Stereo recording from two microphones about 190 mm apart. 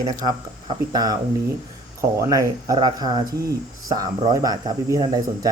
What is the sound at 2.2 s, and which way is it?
Speech, 20° right (ahead or behind).